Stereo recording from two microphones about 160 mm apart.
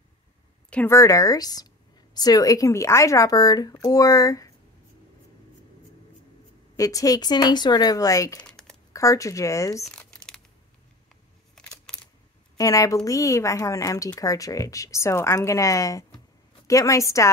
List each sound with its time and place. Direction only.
0.7 s speech: 10° left (ahead or behind)
0.9 s speech: 20° left (ahead or behind)
6.8 s speech: 20° left (ahead or behind)
8.4 s typing: 5° left (ahead or behind)
8.9 s speech: 20° left (ahead or behind)
9.8 s crumpling: 5° left (ahead or behind)
11.9 s a sound: 5° left (ahead or behind)
12.5 s speech: 20° left (ahead or behind)